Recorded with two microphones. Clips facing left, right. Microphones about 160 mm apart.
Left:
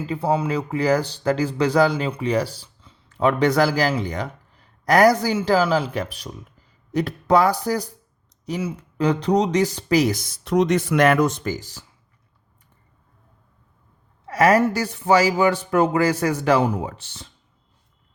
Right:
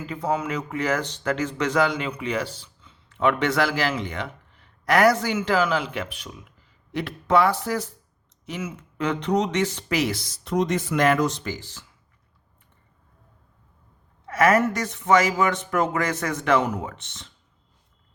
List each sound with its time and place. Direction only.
0.0 s speech: 30° left (ahead or behind)
14.3 s speech: 35° left (ahead or behind)